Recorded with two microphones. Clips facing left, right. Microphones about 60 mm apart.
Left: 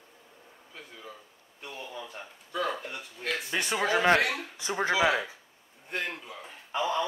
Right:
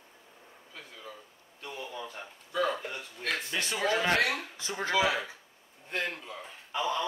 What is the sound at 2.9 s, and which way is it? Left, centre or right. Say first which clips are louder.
Speech: even; centre.